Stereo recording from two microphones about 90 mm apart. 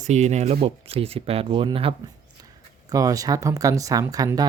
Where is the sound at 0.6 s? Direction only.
90° right.